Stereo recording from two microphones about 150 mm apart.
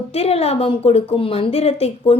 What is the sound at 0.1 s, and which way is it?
A woman's voice, 40° left (ahead or behind).